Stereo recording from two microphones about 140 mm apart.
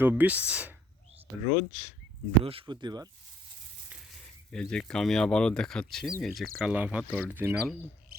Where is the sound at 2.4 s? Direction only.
40° right (ahead or behind).